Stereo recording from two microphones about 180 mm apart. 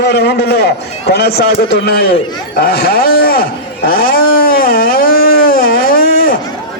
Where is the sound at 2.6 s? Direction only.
55° left (ahead or behind).